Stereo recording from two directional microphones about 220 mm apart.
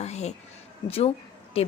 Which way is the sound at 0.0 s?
30° left (ahead or behind).